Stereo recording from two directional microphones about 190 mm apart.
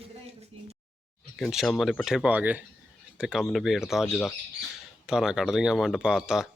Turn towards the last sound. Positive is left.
turn(degrees=-5)  # may be behind; listen again after turning